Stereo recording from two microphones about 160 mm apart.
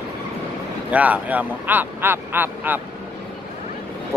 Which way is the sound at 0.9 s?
10° right (ahead or behind).